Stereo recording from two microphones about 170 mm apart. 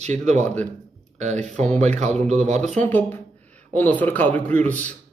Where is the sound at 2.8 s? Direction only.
10° left (ahead or behind).